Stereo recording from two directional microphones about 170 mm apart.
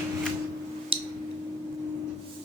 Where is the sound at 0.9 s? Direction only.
35° right (ahead or behind).